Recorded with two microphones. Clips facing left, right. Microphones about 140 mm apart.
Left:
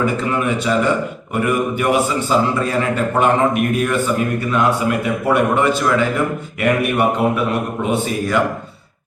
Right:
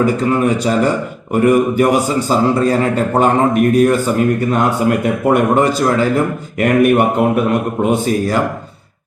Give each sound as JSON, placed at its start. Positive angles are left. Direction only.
{"t": 0.0, "sound": "a man's voice", "side_deg": -40}